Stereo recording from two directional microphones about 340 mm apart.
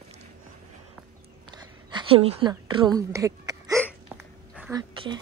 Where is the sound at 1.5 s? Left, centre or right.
Centre.